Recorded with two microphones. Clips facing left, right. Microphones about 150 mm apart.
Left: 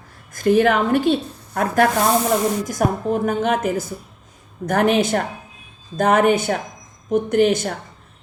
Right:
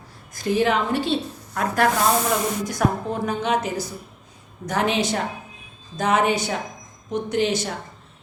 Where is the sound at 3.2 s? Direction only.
50° left (ahead or behind).